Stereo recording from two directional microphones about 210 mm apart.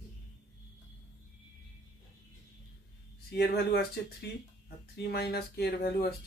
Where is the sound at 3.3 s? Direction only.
50° left (ahead or behind).